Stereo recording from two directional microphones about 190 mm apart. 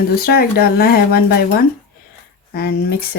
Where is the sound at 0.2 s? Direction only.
55° left (ahead or behind).